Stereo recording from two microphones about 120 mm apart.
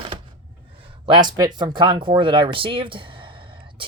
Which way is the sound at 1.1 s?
40° right (ahead or behind).